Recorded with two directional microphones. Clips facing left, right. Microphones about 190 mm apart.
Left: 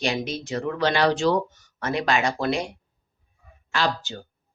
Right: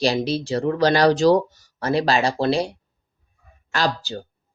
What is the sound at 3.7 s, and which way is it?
Speech, 40° right (ahead or behind).